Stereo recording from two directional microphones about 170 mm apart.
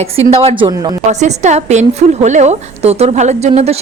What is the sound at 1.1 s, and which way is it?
Speech, 40° right (ahead or behind).